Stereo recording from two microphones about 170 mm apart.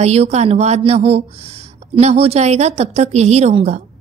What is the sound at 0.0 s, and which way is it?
A woman's voice, 40° right (ahead or behind).